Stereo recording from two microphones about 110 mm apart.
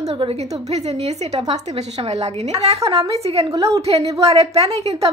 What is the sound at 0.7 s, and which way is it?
Speech, 80° right.